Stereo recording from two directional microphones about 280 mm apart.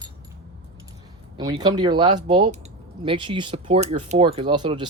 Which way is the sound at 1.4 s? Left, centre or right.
Centre.